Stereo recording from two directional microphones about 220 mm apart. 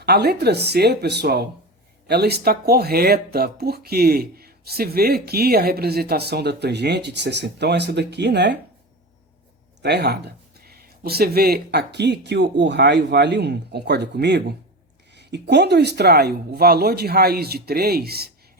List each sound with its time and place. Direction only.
0.0 s speech: 45° right (ahead or behind)
9.8 s speech: 50° right (ahead or behind)